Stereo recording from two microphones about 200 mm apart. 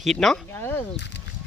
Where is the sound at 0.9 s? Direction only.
60° left (ahead or behind).